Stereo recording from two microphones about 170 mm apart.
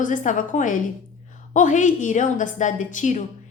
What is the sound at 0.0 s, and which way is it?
A woman's voice, 50° left (ahead or behind).